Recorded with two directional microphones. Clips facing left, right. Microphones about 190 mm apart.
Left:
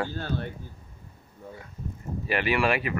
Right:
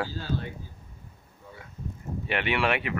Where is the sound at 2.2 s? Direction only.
Centre (ahead or behind).